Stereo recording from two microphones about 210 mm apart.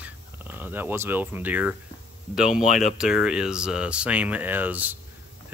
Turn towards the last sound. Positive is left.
turn(degrees=-10)  # may be behind; listen again after turning